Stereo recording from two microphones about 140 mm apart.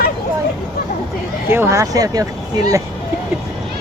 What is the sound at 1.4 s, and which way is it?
Speech, 15° right (ahead or behind).